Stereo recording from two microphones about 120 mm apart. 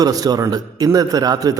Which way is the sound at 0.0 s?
30° right (ahead or behind).